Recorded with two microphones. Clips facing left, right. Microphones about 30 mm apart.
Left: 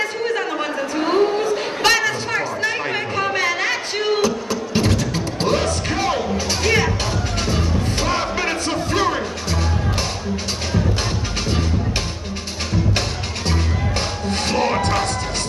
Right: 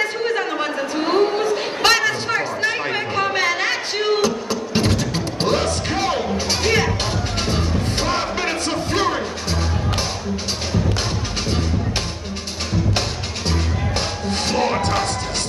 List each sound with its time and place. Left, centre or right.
1.0 s a sound: right
2.6 s chatter: centre
4.7 s music: centre
13.5 s music: centre